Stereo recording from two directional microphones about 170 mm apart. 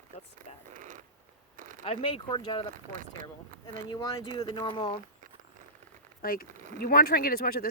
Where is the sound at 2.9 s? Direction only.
50° right (ahead or behind).